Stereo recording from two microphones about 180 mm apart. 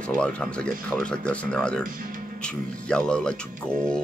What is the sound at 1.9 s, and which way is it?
Speech, 50° right (ahead or behind).